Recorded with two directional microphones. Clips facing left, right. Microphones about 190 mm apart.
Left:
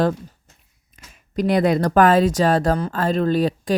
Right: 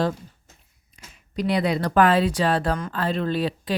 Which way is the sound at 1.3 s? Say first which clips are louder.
Left 5 dB; 50° left (ahead or behind).